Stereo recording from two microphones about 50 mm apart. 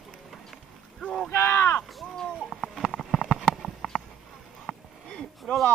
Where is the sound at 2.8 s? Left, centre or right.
Centre.